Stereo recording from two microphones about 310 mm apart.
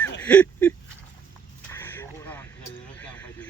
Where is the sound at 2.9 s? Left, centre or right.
Centre.